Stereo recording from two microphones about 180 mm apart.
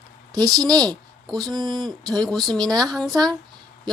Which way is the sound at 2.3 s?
Centre (ahead or behind).